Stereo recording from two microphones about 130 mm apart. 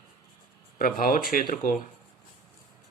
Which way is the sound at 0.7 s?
90° left.